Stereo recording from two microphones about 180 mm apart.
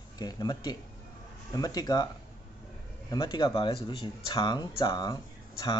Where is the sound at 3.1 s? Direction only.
25° left (ahead or behind).